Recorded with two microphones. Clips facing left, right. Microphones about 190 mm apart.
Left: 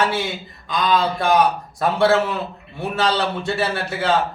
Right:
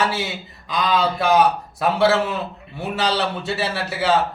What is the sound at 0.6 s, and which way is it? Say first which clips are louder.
A man's voice: left 1 dB; 5° right (ahead or behind).